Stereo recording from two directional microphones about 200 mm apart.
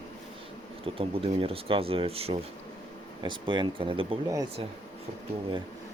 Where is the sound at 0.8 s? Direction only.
30° right (ahead or behind).